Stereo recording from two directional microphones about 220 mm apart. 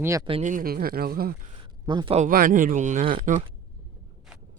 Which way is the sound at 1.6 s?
20° right (ahead or behind).